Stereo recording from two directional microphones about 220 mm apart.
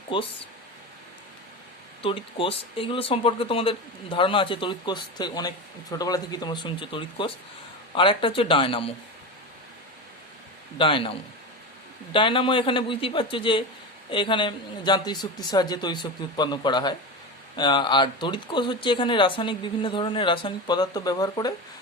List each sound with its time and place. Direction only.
2.0 s speech: 25° left (ahead or behind)
10.8 s speech: 25° left (ahead or behind)